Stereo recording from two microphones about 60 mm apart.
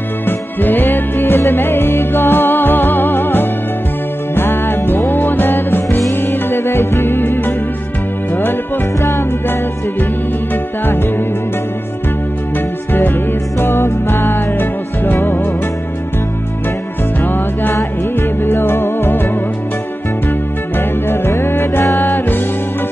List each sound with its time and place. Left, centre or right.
0.3 s music: left
6.3 s music: left
12.9 s music: left
17.2 s music: left
21.1 s music: left